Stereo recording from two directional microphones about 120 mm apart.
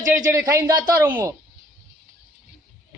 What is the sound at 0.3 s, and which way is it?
Speech, 25° right (ahead or behind).